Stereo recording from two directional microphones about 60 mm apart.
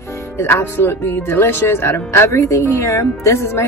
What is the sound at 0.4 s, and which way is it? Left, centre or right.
Speech, left.